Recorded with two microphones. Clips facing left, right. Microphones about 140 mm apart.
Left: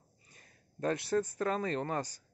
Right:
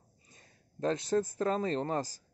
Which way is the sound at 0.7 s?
25° right (ahead or behind).